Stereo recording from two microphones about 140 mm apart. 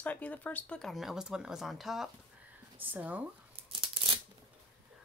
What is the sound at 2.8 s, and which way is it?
Speech, 10° right (ahead or behind).